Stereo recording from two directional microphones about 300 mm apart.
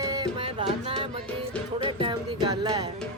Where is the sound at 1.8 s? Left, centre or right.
Centre.